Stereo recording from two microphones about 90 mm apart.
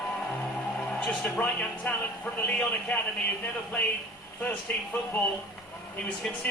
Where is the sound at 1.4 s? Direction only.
15° left (ahead or behind).